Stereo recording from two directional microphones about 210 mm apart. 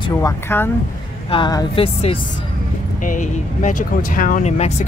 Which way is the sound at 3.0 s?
40° left (ahead or behind).